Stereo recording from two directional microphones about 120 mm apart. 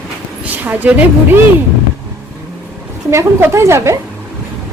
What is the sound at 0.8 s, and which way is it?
Speech, 10° right (ahead or behind).